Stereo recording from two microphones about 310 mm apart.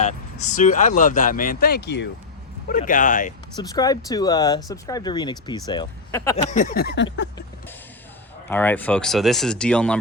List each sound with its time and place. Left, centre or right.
0.0 s speech: left
3.5 s speech: centre
6.3 s speech: left
8.4 s speech: centre